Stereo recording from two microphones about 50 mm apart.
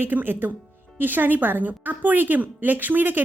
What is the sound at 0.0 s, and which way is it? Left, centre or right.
A woman's voice, right.